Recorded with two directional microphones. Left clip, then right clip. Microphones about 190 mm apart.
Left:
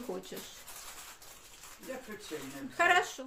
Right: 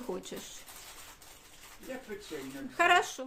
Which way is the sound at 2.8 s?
25° right (ahead or behind).